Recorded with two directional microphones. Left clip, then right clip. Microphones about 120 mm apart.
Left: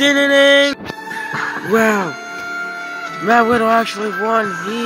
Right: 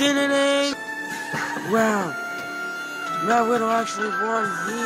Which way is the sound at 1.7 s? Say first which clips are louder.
Left 7 dB; 10° left (ahead or behind).